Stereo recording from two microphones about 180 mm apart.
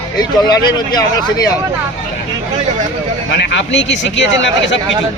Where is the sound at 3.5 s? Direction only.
85° left.